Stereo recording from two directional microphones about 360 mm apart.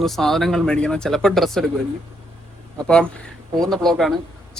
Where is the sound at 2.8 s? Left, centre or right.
Centre.